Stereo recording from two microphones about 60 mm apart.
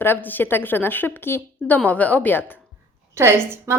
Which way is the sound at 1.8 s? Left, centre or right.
Left.